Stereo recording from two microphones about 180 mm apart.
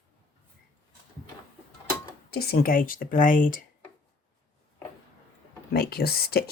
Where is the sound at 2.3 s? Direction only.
60° left (ahead or behind).